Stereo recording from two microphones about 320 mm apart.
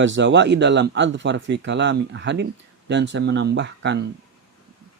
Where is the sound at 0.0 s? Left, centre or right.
Right.